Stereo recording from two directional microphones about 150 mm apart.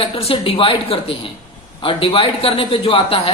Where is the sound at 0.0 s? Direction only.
40° left (ahead or behind).